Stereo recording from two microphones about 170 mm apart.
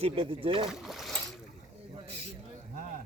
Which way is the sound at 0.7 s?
Centre (ahead or behind).